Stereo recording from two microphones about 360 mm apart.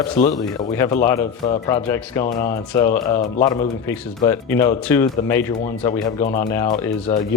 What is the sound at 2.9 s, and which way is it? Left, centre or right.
Speech, left.